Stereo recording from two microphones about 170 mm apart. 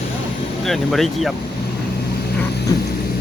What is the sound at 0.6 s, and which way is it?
Speech, centre (ahead or behind).